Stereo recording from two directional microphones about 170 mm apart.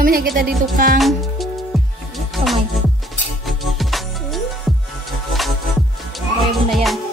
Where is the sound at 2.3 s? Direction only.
Centre (ahead or behind).